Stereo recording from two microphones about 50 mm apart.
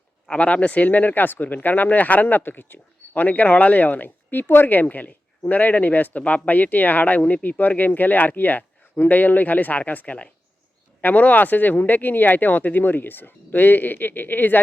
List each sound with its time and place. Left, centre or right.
0.3 s speech: left